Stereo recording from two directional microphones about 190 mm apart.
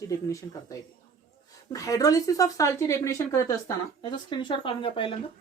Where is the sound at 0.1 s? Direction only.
15° left (ahead or behind).